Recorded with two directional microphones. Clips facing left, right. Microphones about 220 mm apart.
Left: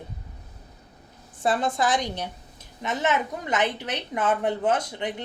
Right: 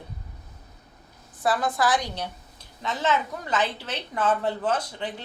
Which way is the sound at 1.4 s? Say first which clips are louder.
Even; 25° left (ahead or behind).